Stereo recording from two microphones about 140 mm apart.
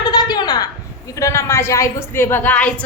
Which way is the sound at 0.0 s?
30° left (ahead or behind).